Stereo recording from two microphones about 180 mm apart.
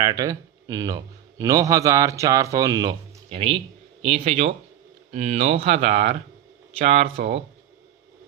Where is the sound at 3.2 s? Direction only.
30° right (ahead or behind).